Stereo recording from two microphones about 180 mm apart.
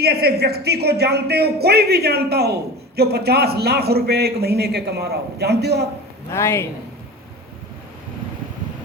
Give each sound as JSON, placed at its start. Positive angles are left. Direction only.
{"t": 0.0, "sound": "a man's voice", "side_deg": -65}
{"t": 6.3, "sound": "a man's voice", "side_deg": 15}